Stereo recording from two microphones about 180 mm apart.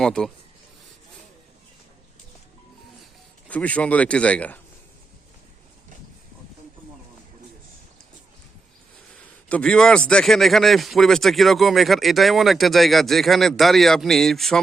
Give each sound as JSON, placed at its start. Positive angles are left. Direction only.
{"t": 0.0, "sound": "speech", "side_deg": 5}
{"t": 3.5, "sound": "speech", "side_deg": 10}
{"t": 9.1, "sound": "a man's voice", "side_deg": 5}